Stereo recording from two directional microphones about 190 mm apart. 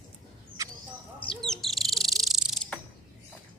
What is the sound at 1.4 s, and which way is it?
Bird, centre (ahead or behind).